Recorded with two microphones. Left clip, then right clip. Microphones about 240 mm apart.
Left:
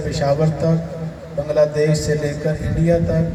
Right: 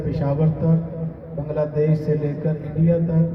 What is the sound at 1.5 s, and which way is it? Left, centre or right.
Speech, left.